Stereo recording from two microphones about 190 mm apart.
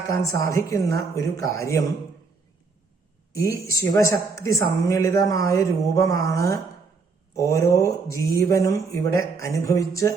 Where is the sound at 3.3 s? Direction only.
15° left (ahead or behind).